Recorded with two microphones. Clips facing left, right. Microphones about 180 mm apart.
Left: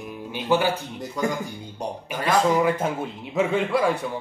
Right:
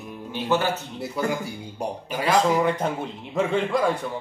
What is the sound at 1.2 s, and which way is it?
Speech, 10° right (ahead or behind).